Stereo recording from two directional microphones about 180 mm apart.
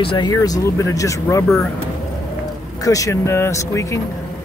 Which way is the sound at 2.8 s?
20° left (ahead or behind).